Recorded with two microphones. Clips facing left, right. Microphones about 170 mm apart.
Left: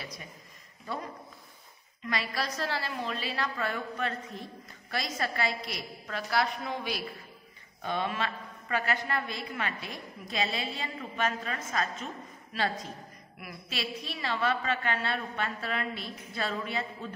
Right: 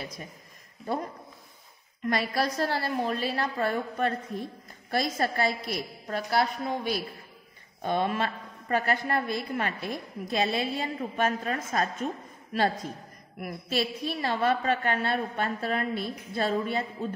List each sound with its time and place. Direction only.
2.0 s a woman's voice: 55° right (ahead or behind)
13.4 s a woman's voice: 45° right (ahead or behind)